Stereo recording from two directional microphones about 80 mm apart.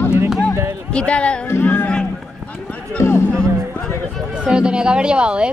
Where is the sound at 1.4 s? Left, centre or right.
Left.